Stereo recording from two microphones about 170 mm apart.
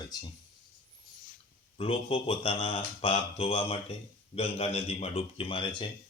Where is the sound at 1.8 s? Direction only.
35° left (ahead or behind).